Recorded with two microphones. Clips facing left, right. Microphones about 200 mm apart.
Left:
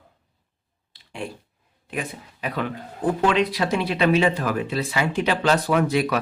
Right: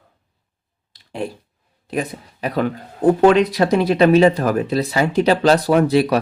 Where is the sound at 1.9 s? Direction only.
40° right (ahead or behind).